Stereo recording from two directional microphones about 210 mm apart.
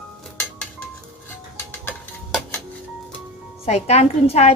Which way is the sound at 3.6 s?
30° left (ahead or behind).